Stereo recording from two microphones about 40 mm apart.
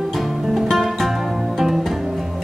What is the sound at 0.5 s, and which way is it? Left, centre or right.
Music, centre.